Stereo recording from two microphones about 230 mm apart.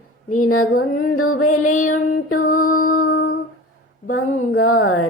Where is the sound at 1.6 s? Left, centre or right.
Left.